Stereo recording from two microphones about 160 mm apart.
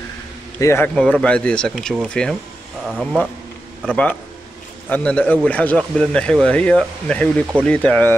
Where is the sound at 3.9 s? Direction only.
10° left (ahead or behind).